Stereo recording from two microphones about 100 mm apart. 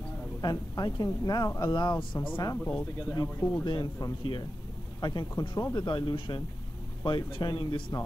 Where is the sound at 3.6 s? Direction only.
45° left (ahead or behind).